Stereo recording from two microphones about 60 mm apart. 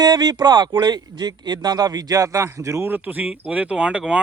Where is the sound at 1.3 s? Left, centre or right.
Right.